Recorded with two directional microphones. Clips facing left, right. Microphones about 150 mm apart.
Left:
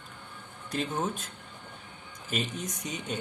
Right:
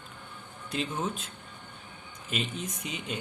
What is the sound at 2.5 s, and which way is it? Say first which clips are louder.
Speech: left 1 dB; 40° left (ahead or behind).